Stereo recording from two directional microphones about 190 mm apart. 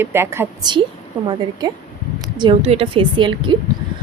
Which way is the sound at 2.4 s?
30° right (ahead or behind).